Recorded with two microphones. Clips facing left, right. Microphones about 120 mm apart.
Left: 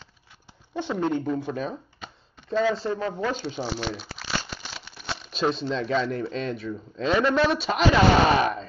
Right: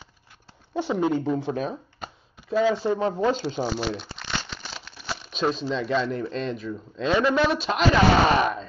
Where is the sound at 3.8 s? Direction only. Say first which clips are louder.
Right 3 dB; centre (ahead or behind).